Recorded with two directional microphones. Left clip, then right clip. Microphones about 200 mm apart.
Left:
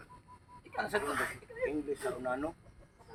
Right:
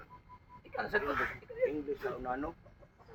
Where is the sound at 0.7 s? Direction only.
15° left (ahead or behind).